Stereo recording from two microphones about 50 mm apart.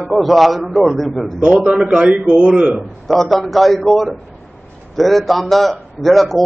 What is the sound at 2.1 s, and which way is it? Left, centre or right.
Speech, centre.